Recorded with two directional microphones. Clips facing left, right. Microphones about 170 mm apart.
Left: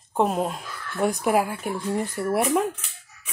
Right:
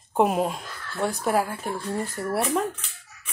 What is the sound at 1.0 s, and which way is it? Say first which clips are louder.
Speech: left 2 dB; 15° left (ahead or behind).